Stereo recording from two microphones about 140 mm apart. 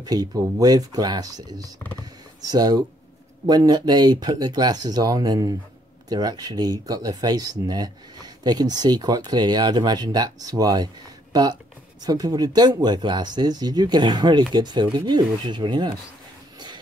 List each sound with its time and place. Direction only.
0.0 s speech: 25° right (ahead or behind)
2.0 s computer keyboard: 30° right (ahead or behind)
3.4 s speech: 30° right (ahead or behind)
12.0 s speech: 25° right (ahead or behind)